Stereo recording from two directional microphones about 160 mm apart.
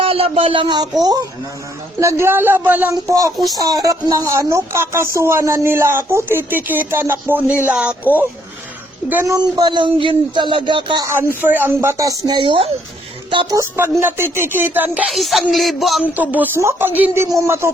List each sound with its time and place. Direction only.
0.0 s speech: 35° right (ahead or behind); by 8.3 s 10° right (ahead or behind)
9.2 s speech: 25° right (ahead or behind)
11.3 s speech: 10° right (ahead or behind); by 13.6 s 30° right (ahead or behind)
13.6 s speech: 15° right (ahead or behind)
14.3 s a sound: 15° right (ahead or behind)
16.1 s speech: 10° right (ahead or behind)